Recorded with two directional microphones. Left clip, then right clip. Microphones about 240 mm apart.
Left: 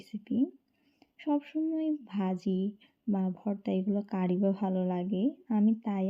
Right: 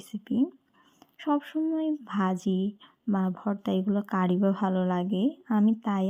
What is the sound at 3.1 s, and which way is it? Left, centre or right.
Speech, right.